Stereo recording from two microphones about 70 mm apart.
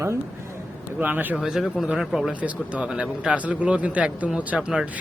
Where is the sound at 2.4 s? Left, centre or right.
Centre.